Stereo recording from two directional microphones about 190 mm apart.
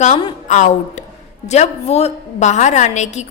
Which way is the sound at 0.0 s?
30° left (ahead or behind).